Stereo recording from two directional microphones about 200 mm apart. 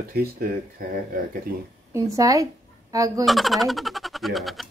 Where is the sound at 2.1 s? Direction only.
15° right (ahead or behind).